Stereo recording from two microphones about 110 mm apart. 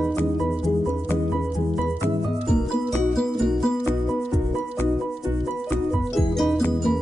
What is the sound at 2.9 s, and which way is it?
Music, centre (ahead or behind).